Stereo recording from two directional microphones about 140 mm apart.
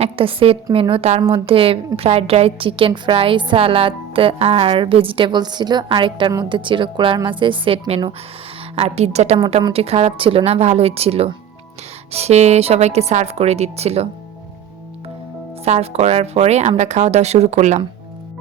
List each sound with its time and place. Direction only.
0.0 s a woman's voice: 40° right (ahead or behind)
15.6 s a woman's voice: 50° right (ahead or behind)